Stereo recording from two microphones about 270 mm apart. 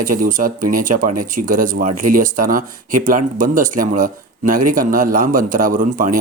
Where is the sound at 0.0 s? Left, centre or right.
Right.